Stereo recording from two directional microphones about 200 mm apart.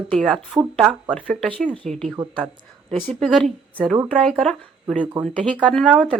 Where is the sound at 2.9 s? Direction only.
Centre (ahead or behind).